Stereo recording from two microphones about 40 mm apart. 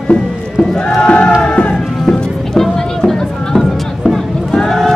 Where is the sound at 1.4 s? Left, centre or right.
Left.